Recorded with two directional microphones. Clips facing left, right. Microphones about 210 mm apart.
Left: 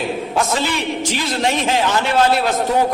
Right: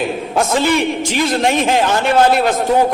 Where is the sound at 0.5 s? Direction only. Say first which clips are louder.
Right 6 dB; 50° right (ahead or behind).